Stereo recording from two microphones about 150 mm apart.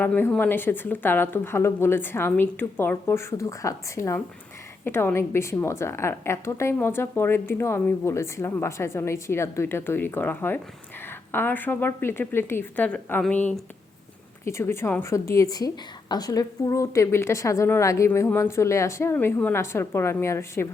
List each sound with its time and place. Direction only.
0.0 s a woman's voice: 10° left (ahead or behind)